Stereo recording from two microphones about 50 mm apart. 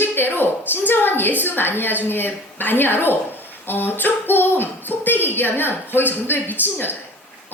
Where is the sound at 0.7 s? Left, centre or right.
Left.